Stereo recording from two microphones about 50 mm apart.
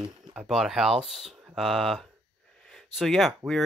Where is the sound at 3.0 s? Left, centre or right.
Centre.